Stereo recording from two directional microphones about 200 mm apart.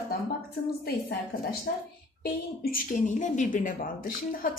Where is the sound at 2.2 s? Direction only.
50° left (ahead or behind).